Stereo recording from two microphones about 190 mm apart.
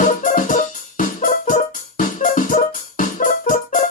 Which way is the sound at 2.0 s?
45° left (ahead or behind).